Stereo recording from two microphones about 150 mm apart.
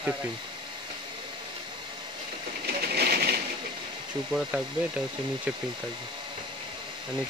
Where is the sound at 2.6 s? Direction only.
90° right.